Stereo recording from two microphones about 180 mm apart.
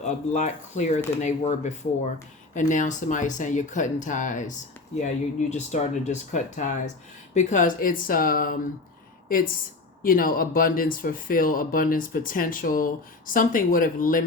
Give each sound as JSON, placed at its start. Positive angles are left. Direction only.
{"t": 0.0, "sound": "speech", "side_deg": 40}